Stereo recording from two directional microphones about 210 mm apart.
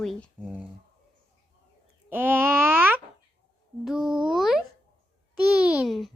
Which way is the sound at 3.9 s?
5° right (ahead or behind).